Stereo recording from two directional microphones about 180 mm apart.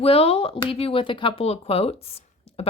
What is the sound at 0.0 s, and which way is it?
Speech, 30° left (ahead or behind).